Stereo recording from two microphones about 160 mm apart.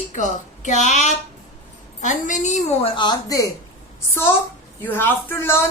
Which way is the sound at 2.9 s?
25° left (ahead or behind).